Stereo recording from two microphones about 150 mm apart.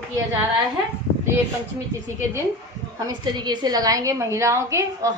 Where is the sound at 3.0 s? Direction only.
30° right (ahead or behind).